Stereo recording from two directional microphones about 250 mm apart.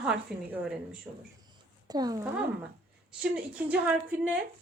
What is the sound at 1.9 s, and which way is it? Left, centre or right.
Speech, centre.